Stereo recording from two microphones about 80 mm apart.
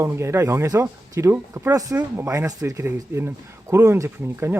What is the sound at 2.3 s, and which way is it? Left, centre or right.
Speech, right.